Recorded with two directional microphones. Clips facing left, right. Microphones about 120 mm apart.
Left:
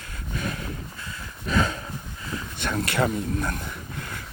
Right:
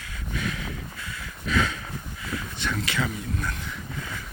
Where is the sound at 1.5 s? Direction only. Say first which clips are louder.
Left 1 dB; 40° left (ahead or behind).